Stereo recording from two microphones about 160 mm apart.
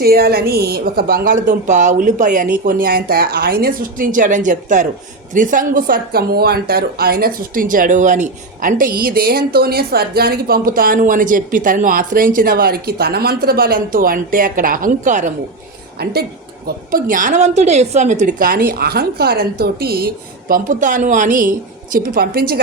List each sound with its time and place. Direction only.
0.0 s speech: 70° right (ahead or behind); by 15.3 s 50° right (ahead or behind)
16.0 s a woman's voice: 80° right
16.6 s speech: 60° right (ahead or behind)
21.9 s a woman's voice: 70° right (ahead or behind)